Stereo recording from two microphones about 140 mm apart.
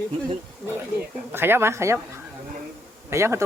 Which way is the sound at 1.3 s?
15° right (ahead or behind).